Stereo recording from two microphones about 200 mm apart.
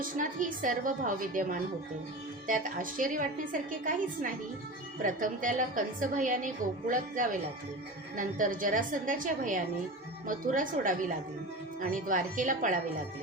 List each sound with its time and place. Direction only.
0.0 s a woman's voice: 40° right (ahead or behind)